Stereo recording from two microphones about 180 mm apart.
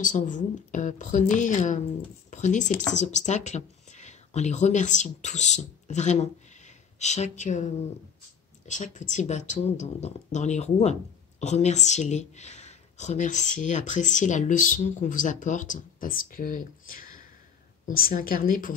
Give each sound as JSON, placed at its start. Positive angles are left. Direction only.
{"t": 0.0, "sound": "a woman's voice", "side_deg": 45}